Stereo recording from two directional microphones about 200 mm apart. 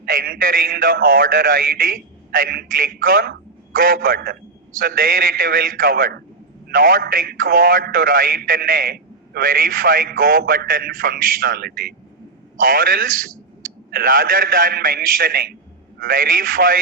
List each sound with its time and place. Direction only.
0.0 s a man's voice: 45° right (ahead or behind)